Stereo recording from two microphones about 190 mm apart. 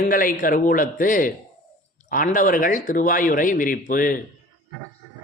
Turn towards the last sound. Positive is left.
turn(degrees=45)  # may be behind; listen again after turning